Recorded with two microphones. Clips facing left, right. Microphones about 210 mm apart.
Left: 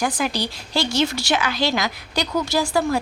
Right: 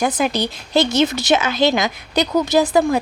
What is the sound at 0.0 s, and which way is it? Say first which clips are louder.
Speech: right 4 dB; 20° right (ahead or behind).